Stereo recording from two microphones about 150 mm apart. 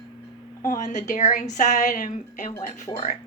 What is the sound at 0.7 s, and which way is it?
A woman's voice, 55° left (ahead or behind).